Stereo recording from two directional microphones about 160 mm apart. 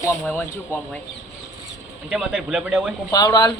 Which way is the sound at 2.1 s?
5° right (ahead or behind).